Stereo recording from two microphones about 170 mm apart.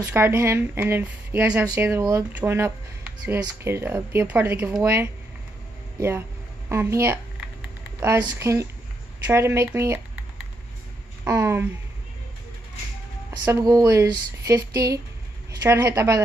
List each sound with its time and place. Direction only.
0.0 s a woman's voice: 15° right (ahead or behind)
11.2 s speech: 15° right (ahead or behind)
13.3 s speech: 20° right (ahead or behind)